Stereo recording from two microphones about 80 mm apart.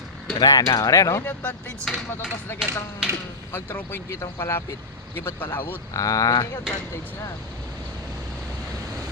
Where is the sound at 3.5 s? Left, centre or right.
Left.